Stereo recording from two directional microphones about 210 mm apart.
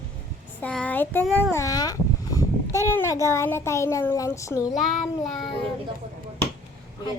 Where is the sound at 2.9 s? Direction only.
15° left (ahead or behind).